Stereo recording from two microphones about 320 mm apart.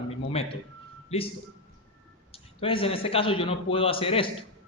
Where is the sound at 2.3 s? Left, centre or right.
Centre.